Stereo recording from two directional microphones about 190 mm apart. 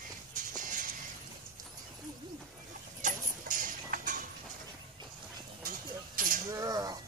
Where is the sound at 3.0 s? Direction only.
45° right (ahead or behind).